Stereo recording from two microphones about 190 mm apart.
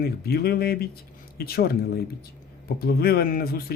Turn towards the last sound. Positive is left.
turn(degrees=55)  # may be behind; listen again after turning